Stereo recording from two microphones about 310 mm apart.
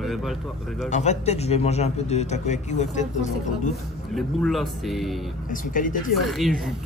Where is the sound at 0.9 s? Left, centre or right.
Left.